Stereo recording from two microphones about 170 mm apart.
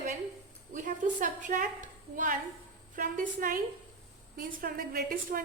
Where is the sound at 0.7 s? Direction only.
50° right (ahead or behind).